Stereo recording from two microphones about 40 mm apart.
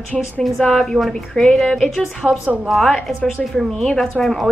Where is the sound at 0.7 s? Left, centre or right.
Centre.